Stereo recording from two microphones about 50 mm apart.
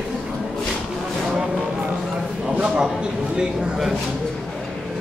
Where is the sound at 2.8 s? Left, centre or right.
Centre.